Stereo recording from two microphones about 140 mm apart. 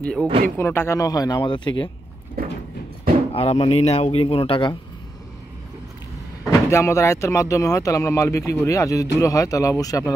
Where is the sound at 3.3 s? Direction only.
45° left (ahead or behind).